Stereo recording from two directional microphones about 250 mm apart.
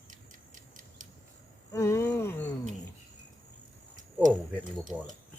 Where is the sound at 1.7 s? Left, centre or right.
Centre.